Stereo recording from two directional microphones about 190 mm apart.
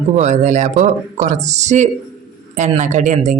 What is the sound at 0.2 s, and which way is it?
Speech, 40° right (ahead or behind).